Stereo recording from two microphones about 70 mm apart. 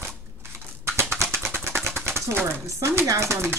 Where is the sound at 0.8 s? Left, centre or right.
Right.